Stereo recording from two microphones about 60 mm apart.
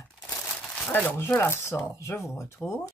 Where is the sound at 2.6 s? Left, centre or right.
Left.